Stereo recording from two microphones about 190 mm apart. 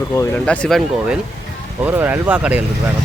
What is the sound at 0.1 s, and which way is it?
Speech, 10° left (ahead or behind).